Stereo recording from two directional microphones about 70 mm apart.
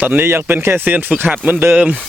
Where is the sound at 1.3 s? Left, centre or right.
Centre.